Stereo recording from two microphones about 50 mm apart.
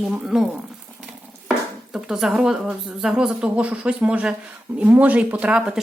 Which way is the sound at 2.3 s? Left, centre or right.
Centre.